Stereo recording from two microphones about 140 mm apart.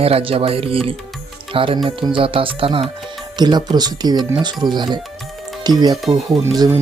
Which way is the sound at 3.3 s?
30° right (ahead or behind).